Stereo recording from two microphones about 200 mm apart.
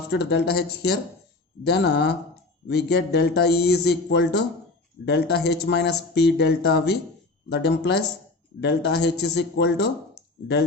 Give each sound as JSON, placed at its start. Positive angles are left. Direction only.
{"t": 0.1, "sound": "speech", "side_deg": 55}